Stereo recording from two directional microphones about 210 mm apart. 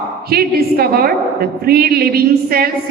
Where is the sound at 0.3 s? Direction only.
45° right (ahead or behind).